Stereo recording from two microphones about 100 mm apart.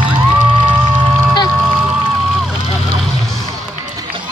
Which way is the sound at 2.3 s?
5° right (ahead or behind).